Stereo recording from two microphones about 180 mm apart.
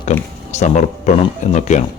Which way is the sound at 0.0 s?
40° left (ahead or behind).